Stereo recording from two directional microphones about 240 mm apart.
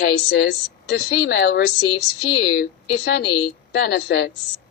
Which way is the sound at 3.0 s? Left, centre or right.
Left.